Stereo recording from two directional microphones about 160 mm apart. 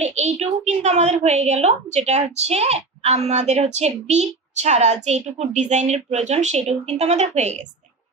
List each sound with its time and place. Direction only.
0.0 s a woman's voice: 45° right (ahead or behind)